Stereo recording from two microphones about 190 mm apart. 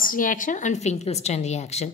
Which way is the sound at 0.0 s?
45° left (ahead or behind).